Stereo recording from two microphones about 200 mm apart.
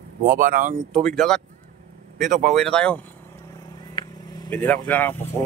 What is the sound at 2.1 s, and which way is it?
Speech, 40° right (ahead or behind).